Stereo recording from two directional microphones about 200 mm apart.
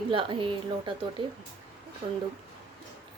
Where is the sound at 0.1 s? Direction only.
25° right (ahead or behind).